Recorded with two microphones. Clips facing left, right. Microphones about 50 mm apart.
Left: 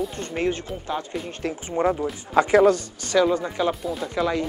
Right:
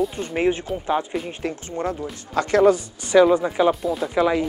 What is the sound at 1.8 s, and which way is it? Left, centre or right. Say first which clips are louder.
Speech: left 5 dB; centre.